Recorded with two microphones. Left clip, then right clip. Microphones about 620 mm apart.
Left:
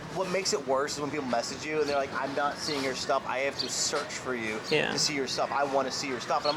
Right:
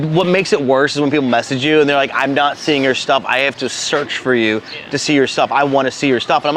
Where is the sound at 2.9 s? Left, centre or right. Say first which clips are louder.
Right 13 dB; right.